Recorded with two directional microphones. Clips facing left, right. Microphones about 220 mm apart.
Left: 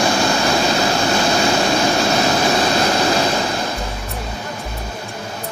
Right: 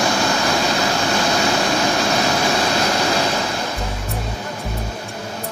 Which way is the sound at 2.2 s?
30° left (ahead or behind).